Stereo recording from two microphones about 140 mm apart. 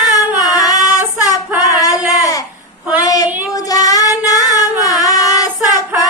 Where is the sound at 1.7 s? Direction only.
25° left (ahead or behind).